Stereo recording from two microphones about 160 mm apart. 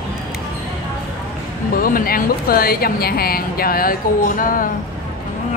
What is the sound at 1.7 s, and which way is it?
Speech, 65° left (ahead or behind).